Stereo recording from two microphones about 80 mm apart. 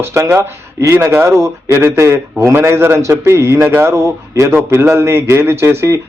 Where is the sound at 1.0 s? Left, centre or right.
Right.